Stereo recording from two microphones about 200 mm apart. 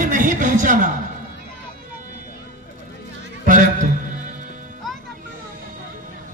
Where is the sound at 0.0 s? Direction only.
40° right (ahead or behind).